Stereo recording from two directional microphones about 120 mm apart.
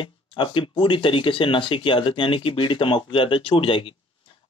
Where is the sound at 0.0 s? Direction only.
45° left (ahead or behind).